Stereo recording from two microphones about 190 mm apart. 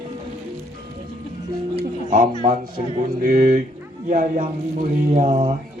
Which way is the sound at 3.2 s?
45° right (ahead or behind).